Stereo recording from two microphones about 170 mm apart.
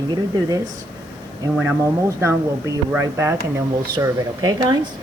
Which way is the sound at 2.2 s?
15° right (ahead or behind).